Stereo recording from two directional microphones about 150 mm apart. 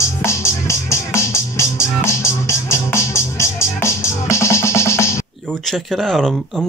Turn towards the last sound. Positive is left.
turn(degrees=0)  # may be behind; listen again after turning